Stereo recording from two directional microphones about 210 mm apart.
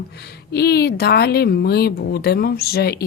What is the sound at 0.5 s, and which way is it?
A woman's voice, 50° left (ahead or behind).